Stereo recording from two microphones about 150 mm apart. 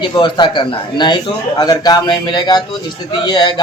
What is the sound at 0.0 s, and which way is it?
A man's voice, 30° left (ahead or behind).